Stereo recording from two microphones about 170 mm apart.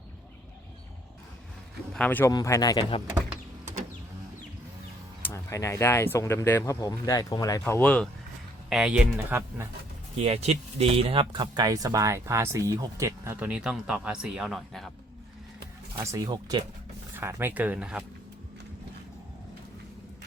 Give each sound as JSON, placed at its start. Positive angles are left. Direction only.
{"t": 1.9, "sound": "speech", "side_deg": 10}
{"t": 2.3, "sound": "speech", "side_deg": 20}
{"t": 5.2, "sound": "speech", "side_deg": 15}
{"t": 7.6, "sound": "speech", "side_deg": 10}
{"t": 8.7, "sound": "speech", "side_deg": -5}
{"t": 10.2, "sound": "speech", "side_deg": -40}
{"t": 16.0, "sound": "speech", "side_deg": -20}
{"t": 17.2, "sound": "speech", "side_deg": -15}